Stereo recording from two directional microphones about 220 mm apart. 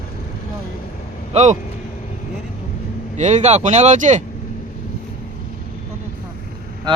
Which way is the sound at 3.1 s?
30° right (ahead or behind).